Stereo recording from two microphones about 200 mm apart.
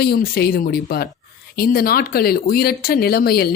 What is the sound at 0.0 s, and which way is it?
Speech, 50° left (ahead or behind).